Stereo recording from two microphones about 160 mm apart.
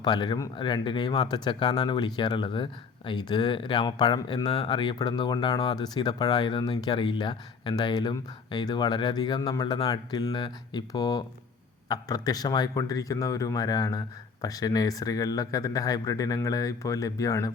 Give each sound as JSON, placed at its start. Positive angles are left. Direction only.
{"t": 0.0, "sound": "speech", "side_deg": 25}